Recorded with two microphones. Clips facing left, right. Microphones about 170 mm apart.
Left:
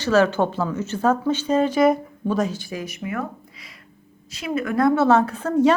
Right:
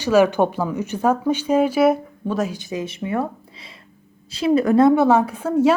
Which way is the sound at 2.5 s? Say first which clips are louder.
Right 3 dB; 20° right (ahead or behind).